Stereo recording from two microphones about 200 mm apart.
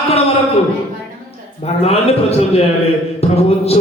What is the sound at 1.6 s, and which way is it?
Speech, 30° left (ahead or behind).